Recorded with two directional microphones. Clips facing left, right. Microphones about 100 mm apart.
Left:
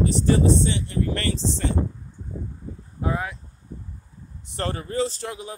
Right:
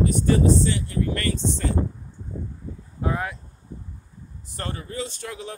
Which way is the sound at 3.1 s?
5° left (ahead or behind).